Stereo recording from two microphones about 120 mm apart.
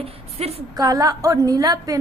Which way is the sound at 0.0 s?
60° right (ahead or behind).